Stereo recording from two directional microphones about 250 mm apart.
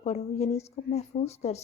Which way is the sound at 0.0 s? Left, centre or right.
Left.